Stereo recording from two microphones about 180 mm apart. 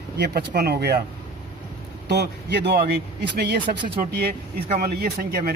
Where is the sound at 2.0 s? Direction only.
65° right (ahead or behind).